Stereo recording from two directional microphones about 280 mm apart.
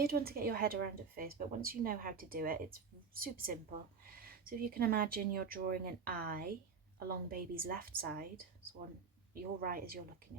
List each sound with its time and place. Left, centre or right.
0.0 s a woman's voice: right
9.3 s a woman's voice: right